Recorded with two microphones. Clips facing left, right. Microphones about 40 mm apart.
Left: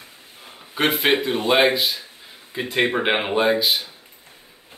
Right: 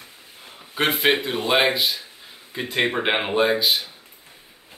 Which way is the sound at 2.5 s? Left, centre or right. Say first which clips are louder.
Left 2 dB; centre.